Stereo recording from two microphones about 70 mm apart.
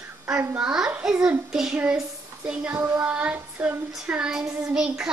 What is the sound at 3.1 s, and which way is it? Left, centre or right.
Child singing, right.